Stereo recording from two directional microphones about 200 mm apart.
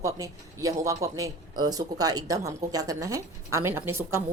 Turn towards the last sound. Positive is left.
turn(degrees=-10)  # may be behind; listen again after turning